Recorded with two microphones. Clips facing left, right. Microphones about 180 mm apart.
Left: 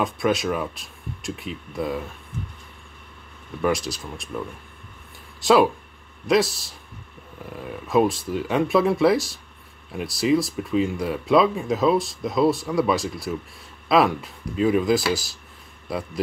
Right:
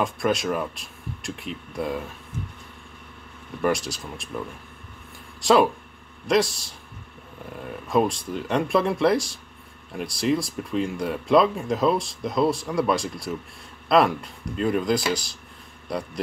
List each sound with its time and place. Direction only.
0.0 s speech: centre (ahead or behind)
3.6 s speech: centre (ahead or behind)
5.4 s speech: centre (ahead or behind)